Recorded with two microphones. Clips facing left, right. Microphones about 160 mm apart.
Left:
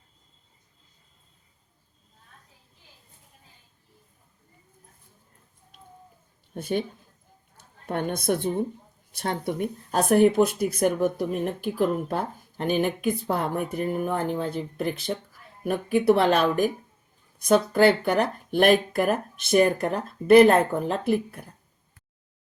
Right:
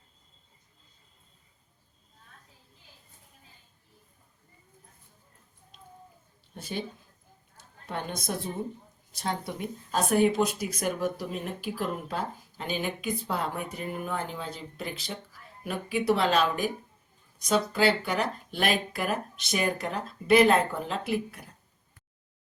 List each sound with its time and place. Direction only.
6.5 s speech: 55° left (ahead or behind)
7.5 s a sound: 55° left (ahead or behind)
9.1 s speech: 60° left (ahead or behind)